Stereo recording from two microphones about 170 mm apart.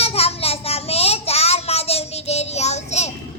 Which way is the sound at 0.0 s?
35° left (ahead or behind).